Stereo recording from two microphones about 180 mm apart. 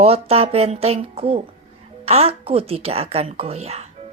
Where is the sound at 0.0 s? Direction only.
35° right (ahead or behind).